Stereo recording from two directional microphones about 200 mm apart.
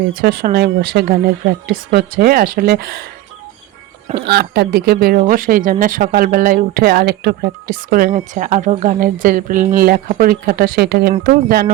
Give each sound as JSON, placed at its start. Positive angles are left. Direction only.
{"t": 0.1, "sound": "speech", "side_deg": -50}
{"t": 4.2, "sound": "speech", "side_deg": -55}